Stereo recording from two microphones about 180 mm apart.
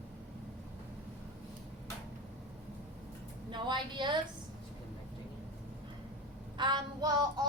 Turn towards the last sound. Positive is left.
turn(degrees=-25)  # may be behind; listen again after turning